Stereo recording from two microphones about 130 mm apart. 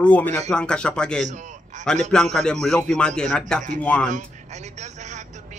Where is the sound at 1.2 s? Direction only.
70° right (ahead or behind).